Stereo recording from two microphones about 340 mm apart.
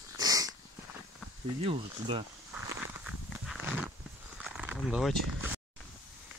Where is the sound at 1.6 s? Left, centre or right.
Centre.